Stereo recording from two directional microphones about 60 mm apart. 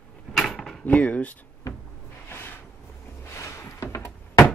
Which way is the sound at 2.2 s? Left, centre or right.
Left.